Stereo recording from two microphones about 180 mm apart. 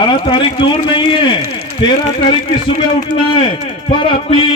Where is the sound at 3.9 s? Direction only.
30° left (ahead or behind).